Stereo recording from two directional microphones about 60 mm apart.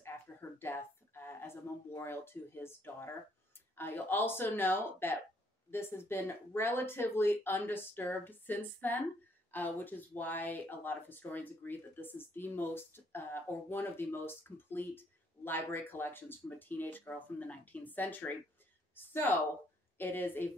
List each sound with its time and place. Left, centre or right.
0.0 s speech: left